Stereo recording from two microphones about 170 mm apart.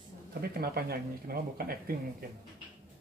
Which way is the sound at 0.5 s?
65° right (ahead or behind).